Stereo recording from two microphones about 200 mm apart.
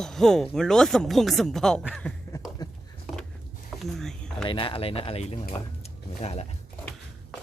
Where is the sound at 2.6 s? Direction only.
20° left (ahead or behind).